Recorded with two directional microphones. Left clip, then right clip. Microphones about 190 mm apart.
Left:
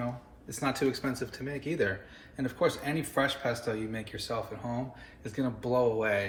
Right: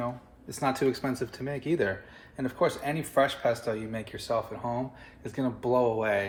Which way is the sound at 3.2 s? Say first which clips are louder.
Right 5 dB; 40° right (ahead or behind).